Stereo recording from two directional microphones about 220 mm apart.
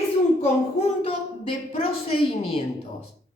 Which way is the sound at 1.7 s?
25° left (ahead or behind).